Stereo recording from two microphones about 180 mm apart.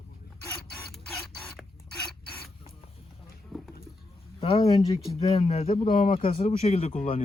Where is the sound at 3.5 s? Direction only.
Centre (ahead or behind).